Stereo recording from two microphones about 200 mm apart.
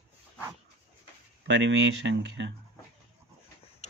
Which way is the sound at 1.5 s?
65° right (ahead or behind).